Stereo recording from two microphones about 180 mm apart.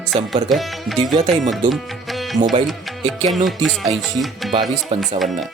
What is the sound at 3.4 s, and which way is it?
Speech, centre (ahead or behind).